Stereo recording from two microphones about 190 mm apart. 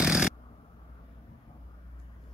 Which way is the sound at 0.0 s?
5° right (ahead or behind).